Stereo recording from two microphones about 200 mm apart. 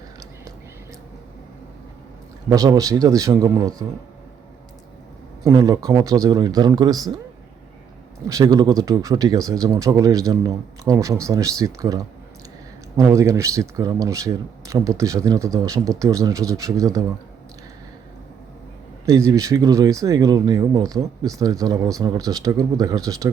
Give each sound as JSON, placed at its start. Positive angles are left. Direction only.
{"t": 2.5, "sound": "speech", "side_deg": -15}
{"t": 5.4, "sound": "speech", "side_deg": -15}
{"t": 8.3, "sound": "speech", "side_deg": -20}
{"t": 19.0, "sound": "speech", "side_deg": -15}